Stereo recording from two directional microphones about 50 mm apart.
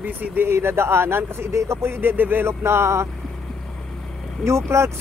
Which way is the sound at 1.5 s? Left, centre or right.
Right.